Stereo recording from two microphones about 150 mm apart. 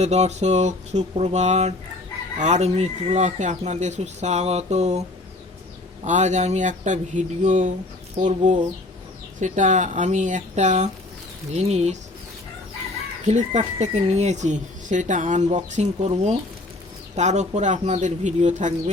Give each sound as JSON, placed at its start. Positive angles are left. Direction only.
{"t": 0.0, "sound": "speech", "side_deg": -45}
{"t": 6.1, "sound": "speech", "side_deg": -50}
{"t": 13.2, "sound": "speech", "side_deg": -50}